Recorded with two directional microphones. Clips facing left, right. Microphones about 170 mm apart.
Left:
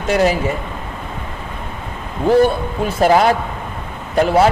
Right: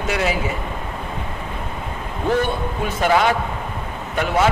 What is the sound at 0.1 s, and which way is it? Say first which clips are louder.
Speech: left 7 dB; 40° left (ahead or behind).